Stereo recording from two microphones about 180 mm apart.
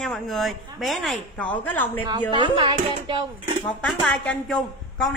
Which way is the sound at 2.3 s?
25° right (ahead or behind).